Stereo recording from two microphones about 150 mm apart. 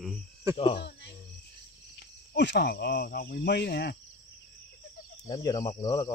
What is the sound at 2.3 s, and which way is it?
Speech, 90° left.